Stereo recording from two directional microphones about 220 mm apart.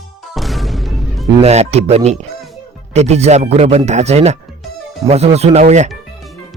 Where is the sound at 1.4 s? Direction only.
30° right (ahead or behind).